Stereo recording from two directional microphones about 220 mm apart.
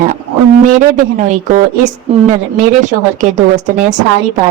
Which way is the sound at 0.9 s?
35° right (ahead or behind).